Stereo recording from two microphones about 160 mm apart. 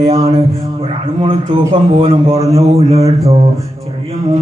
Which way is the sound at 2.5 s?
40° right (ahead or behind).